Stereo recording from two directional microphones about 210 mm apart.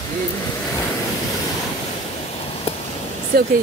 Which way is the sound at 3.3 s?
45° right (ahead or behind).